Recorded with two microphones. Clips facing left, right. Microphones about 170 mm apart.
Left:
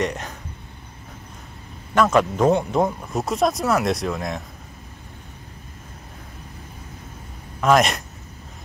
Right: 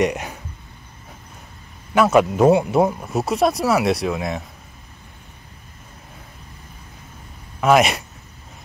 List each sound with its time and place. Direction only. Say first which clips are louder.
0.0 s speech: right 5 dB; 10° right (ahead or behind)
2.0 s speech: right 3 dB; 10° right (ahead or behind)
7.6 s speech: right 2 dB; 5° right (ahead or behind)